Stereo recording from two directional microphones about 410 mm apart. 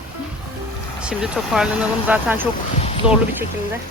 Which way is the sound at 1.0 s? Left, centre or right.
Centre.